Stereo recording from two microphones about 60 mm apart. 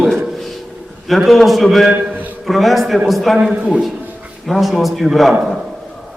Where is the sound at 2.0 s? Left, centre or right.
Right.